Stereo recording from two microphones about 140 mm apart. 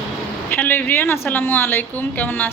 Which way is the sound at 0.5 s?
10° left (ahead or behind).